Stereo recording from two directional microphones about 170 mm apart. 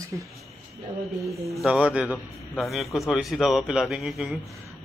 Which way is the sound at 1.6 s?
5° right (ahead or behind).